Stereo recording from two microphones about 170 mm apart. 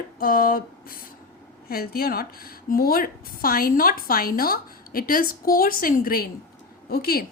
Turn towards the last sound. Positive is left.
turn(degrees=65)  # may be behind; listen again after turning